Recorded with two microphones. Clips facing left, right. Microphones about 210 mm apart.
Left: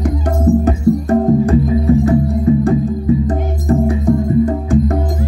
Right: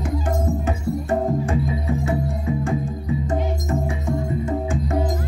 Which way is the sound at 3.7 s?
35° left (ahead or behind).